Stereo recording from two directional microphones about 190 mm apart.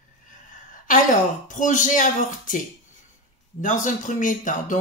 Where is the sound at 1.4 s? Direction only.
40° left (ahead or behind).